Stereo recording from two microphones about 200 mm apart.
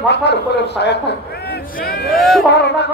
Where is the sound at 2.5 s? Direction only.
55° left (ahead or behind).